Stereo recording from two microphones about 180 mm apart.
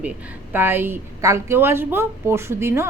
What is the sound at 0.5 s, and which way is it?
Speech, 10° right (ahead or behind).